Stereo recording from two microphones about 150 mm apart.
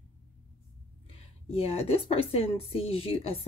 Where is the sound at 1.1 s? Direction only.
40° left (ahead or behind).